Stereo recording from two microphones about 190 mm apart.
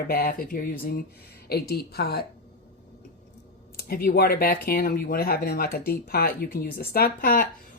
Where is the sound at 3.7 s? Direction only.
55° left (ahead or behind).